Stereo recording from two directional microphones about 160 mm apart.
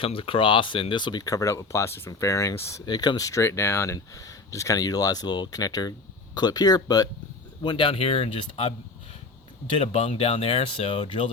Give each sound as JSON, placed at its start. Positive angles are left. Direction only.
{"t": 0.0, "sound": "speech", "side_deg": 35}
{"t": 9.7, "sound": "speech", "side_deg": 35}